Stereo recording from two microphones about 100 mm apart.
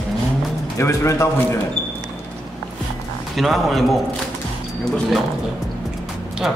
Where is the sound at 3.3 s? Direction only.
Centre (ahead or behind).